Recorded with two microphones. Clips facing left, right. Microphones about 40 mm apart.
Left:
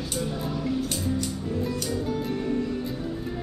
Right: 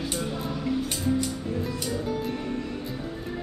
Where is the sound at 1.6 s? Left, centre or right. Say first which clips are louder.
Left 1 dB; centre.